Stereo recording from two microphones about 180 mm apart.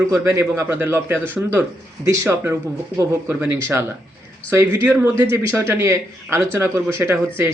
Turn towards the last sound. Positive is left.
turn(degrees=-15)  # may be behind; listen again after turning